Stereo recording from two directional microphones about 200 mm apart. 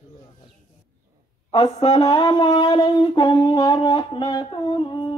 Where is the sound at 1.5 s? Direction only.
20° left (ahead or behind).